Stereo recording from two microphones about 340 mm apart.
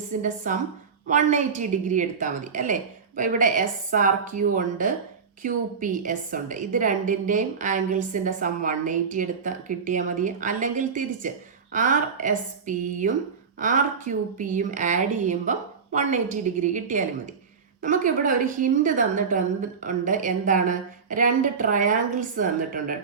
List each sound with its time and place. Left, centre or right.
0.1 s a woman's voice: right